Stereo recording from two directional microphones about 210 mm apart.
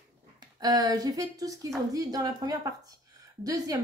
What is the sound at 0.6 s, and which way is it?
Speech, 20° right (ahead or behind).